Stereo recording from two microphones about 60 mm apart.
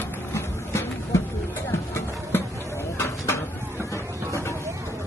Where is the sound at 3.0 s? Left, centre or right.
Left.